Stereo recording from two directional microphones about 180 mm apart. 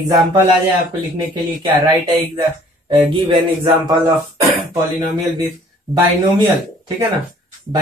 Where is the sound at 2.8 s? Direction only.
30° right (ahead or behind).